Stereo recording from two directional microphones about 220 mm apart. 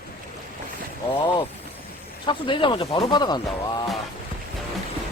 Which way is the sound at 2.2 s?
20° left (ahead or behind).